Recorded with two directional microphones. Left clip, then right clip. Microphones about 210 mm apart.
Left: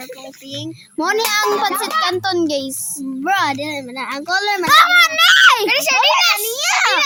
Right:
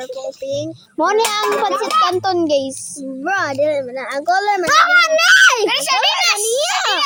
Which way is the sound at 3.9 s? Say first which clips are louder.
Right 3 dB; 90° left.